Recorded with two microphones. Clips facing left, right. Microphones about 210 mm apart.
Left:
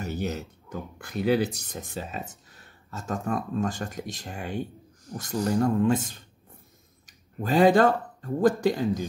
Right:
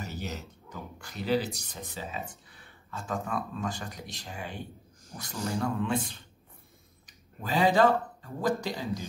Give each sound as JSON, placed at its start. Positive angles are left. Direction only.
{"t": 0.0, "sound": "speech", "side_deg": 55}